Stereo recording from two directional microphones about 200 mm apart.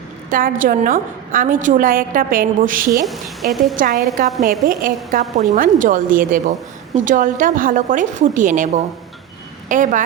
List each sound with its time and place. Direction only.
0.3 s a woman's voice: 45° right (ahead or behind)
3.0 s a woman's voice: centre (ahead or behind)
3.8 s a woman's voice: 45° right (ahead or behind)